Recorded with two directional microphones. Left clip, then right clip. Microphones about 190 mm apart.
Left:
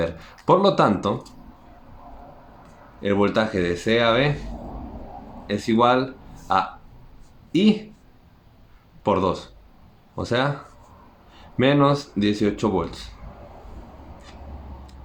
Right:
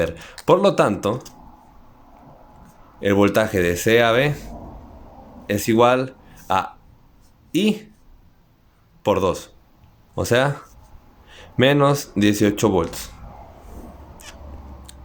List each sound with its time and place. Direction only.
0.0 s speech: 40° right (ahead or behind)
3.0 s speech: 40° right (ahead or behind)
5.5 s speech: 40° right (ahead or behind)
9.0 s speech: 40° right (ahead or behind)
11.5 s speech: 40° right (ahead or behind)